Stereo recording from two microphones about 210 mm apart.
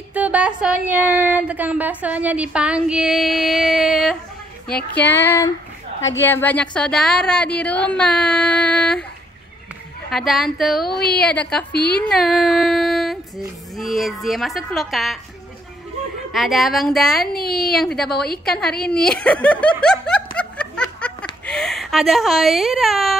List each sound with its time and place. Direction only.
0.1 s speech: 5° right (ahead or behind)
4.9 s child singing: 10° left (ahead or behind)
6.1 s speech: 10° left (ahead or behind)
10.0 s speech: centre (ahead or behind)
10.9 s a woman's voice: 50° left (ahead or behind)
11.2 s child singing: 5° left (ahead or behind)
12.0 s a sound: centre (ahead or behind)
13.7 s speech: centre (ahead or behind)
16.3 s speech: centre (ahead or behind)
17.3 s a woman's voice: 45° left (ahead or behind)
17.7 s speech: centre (ahead or behind)
19.8 s snicker: 5° left (ahead or behind)